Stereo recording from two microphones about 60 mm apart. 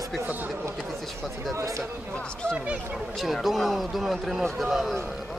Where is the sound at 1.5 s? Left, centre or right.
Right.